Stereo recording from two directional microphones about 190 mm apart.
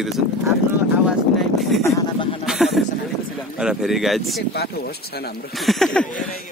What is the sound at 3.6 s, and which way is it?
Mantra, 5° right (ahead or behind).